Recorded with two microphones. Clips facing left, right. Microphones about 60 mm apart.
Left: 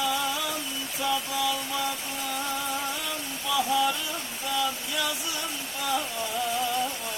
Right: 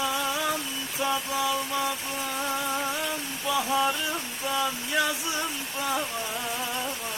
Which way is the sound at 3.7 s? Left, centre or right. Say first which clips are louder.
Even; right.